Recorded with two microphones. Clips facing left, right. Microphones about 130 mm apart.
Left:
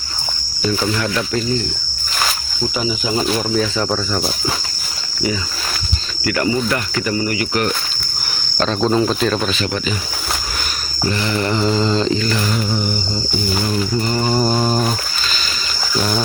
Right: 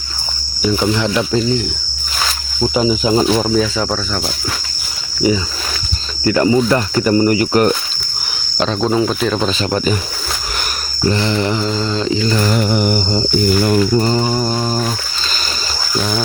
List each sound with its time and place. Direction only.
0.6 s speech: 15° right (ahead or behind)
2.6 s speech: 35° right (ahead or behind)
3.5 s speech: centre (ahead or behind)
6.2 s mantra: 25° right (ahead or behind)
6.7 s speech: 35° right (ahead or behind)
8.5 s speech: 10° right (ahead or behind)
9.5 s speech: 40° right (ahead or behind)
11.1 s mantra: 30° right (ahead or behind)
11.6 s a sound: 10° left (ahead or behind)
12.0 s speech: 15° right (ahead or behind)
12.5 s mantra: 65° right (ahead or behind)
14.3 s a sound: 10° left (ahead or behind)